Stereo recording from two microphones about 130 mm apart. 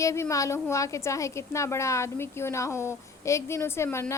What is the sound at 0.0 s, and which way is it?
A woman's voice, 25° left (ahead or behind).